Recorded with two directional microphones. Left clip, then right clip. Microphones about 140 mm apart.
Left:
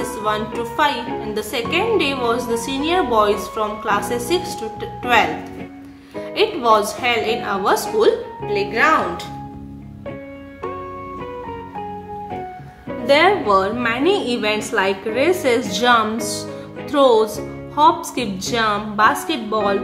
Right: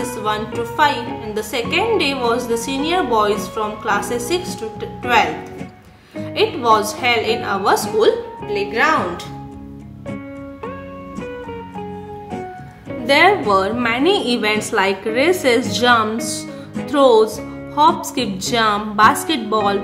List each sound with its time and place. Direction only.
0.0 s a woman's voice: 5° left (ahead or behind)
13.0 s a woman's voice: 5° right (ahead or behind); by 19.8 s 25° right (ahead or behind)